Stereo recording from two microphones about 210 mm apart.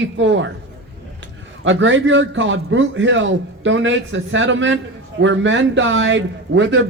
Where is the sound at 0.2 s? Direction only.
60° right (ahead or behind).